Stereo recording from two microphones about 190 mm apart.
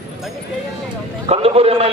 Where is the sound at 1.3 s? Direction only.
30° right (ahead or behind).